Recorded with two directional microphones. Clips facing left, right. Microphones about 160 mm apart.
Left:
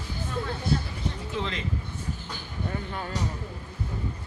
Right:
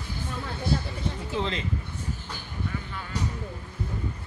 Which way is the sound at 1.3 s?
30° right (ahead or behind).